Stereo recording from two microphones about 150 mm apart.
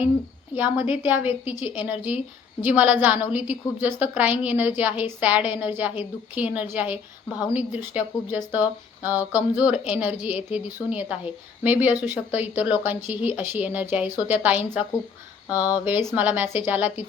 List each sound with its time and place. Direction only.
0.5 s speech: 10° right (ahead or behind)
7.3 s a woman's voice: 25° left (ahead or behind)
7.9 s speech: 10° right (ahead or behind)